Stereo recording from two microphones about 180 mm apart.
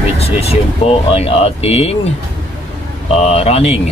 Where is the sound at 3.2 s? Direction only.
35° left (ahead or behind).